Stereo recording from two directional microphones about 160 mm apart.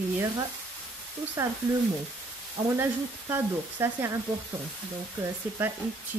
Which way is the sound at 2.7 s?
15° right (ahead or behind).